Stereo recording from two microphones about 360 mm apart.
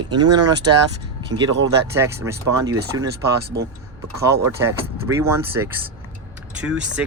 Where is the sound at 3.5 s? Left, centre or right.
Right.